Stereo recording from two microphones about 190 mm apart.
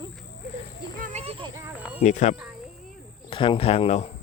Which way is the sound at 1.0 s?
35° right (ahead or behind).